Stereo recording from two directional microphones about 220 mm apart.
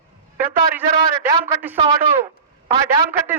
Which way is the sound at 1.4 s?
10° right (ahead or behind).